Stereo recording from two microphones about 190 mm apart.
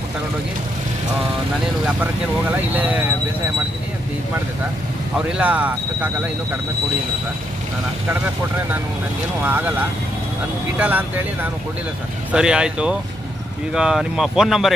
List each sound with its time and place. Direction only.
2.7 s speech: 10° right (ahead or behind)
5.4 s speech: 5° right (ahead or behind)
9.4 s speech: 10° right (ahead or behind)
12.3 s speech: 5° right (ahead or behind)